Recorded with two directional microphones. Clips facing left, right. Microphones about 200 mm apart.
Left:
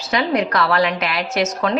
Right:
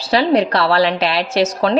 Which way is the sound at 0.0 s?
30° right (ahead or behind).